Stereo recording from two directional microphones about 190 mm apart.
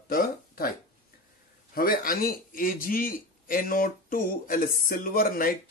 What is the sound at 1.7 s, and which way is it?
Speech, 50° left (ahead or behind).